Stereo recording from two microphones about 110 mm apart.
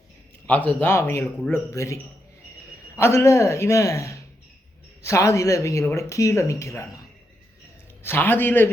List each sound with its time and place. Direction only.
0.4 s speech: 15° left (ahead or behind)
3.0 s speech: 25° left (ahead or behind)
8.0 s speech: 20° left (ahead or behind)